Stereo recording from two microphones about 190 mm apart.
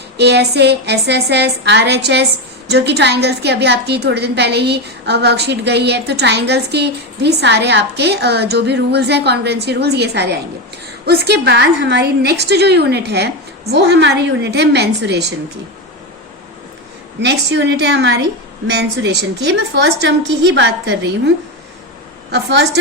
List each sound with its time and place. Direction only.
0.2 s a woman's voice: 60° right (ahead or behind)
17.2 s a woman's voice: 65° right (ahead or behind)
22.3 s a woman's voice: 65° right (ahead or behind)